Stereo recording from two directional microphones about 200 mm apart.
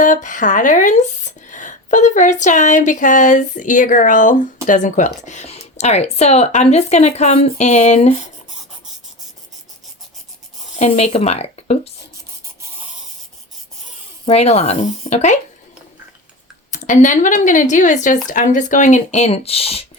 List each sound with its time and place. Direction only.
0.0 s speech: 40° left (ahead or behind)
10.8 s speech: 30° left (ahead or behind)
14.3 s speech: 35° left (ahead or behind)
16.7 s speech: 40° left (ahead or behind)